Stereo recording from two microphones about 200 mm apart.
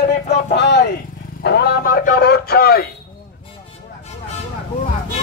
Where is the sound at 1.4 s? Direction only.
55° left (ahead or behind).